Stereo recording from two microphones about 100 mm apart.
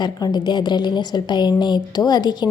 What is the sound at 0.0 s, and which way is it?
A woman's voice, 45° left (ahead or behind).